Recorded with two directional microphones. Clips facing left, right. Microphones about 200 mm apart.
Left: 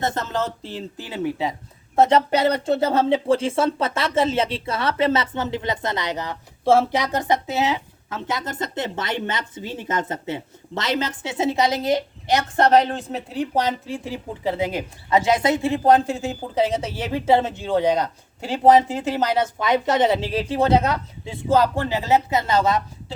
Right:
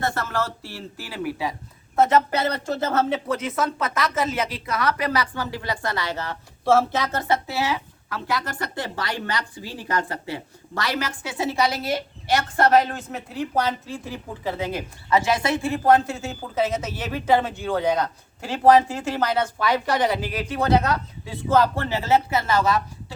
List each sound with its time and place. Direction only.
0.0 s speech: 20° left (ahead or behind)
2.3 s a woman's voice: 15° left (ahead or behind)
3.1 s speech: 30° left (ahead or behind)
13.6 s a woman's voice: 15° left (ahead or behind)
17.0 s speech: 25° left (ahead or behind)